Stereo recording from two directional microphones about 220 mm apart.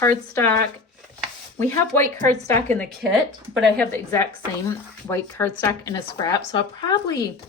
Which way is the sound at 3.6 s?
5° left (ahead or behind).